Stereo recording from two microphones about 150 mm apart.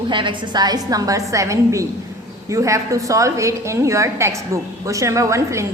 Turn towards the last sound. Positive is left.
turn(degrees=-20)  # may be behind; listen again after turning